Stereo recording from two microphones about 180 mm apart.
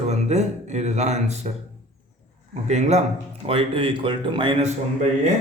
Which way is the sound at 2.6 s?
40° right (ahead or behind).